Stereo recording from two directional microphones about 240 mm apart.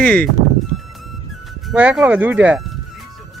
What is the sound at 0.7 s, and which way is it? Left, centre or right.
Music, right.